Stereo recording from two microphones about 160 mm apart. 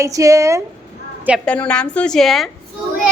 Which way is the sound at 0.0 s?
20° right (ahead or behind).